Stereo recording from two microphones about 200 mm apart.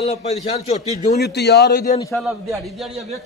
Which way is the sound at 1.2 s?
55° left (ahead or behind).